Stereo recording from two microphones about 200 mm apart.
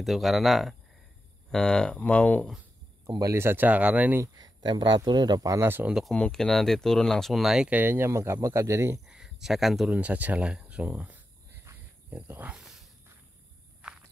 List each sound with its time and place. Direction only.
0.0 s speech: centre (ahead or behind)
3.1 s speech: 15° right (ahead or behind)
9.0 s a sound: centre (ahead or behind)